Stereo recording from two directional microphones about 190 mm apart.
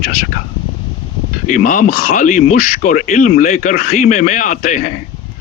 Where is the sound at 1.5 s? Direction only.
45° left (ahead or behind).